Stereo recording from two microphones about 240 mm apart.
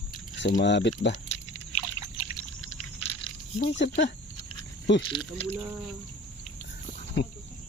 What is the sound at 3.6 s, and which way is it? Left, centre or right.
Speech, left.